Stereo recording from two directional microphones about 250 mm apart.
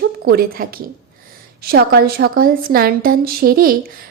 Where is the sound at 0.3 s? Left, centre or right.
Right.